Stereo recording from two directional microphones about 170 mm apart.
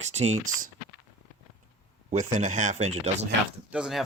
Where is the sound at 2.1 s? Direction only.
45° right (ahead or behind).